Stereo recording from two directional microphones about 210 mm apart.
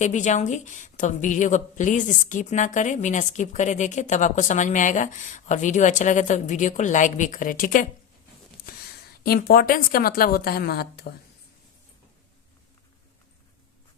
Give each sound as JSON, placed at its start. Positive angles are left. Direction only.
{"t": 0.0, "sound": "a woman's voice", "side_deg": 35}